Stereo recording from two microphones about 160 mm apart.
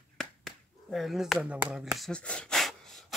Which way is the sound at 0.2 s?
Centre (ahead or behind).